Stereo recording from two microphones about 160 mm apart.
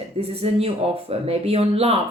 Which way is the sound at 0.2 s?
40° right (ahead or behind).